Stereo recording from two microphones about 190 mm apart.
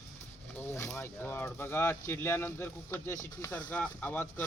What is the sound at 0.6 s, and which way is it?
Speech, 15° left (ahead or behind).